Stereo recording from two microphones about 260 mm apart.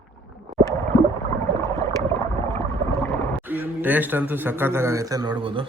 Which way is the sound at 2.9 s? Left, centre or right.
Centre.